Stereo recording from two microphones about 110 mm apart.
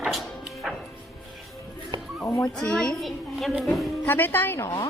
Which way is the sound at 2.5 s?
5° left (ahead or behind).